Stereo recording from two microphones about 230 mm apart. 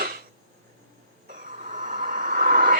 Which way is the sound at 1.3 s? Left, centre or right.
Right.